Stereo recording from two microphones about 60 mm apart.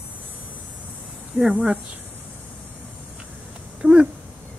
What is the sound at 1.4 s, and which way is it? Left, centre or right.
Speech, centre.